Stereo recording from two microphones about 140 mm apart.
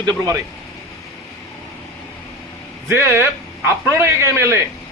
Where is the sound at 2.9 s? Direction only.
15° right (ahead or behind).